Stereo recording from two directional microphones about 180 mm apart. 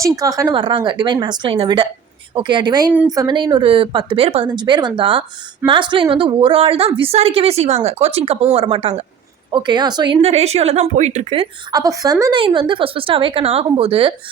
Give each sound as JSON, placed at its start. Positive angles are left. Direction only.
{"t": 0.0, "sound": "a woman's voice", "side_deg": -20}
{"t": 11.7, "sound": "speech", "side_deg": -20}